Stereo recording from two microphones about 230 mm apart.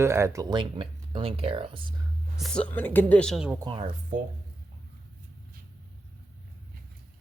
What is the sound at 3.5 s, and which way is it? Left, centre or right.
Speech, right.